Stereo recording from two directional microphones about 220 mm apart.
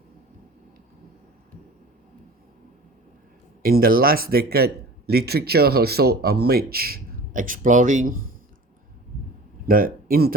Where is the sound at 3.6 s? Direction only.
40° right (ahead or behind).